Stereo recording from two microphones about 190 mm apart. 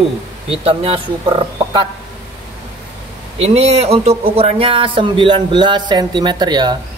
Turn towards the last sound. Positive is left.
turn(degrees=-20)  # may be behind; listen again after turning